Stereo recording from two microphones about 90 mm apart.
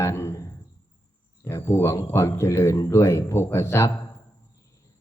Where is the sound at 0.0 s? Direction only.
30° left (ahead or behind).